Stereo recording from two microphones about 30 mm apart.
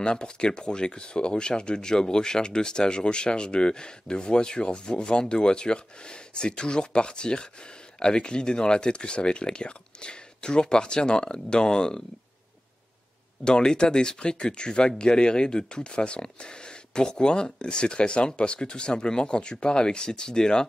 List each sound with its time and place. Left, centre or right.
0.0 s speech: left
13.4 s speech: left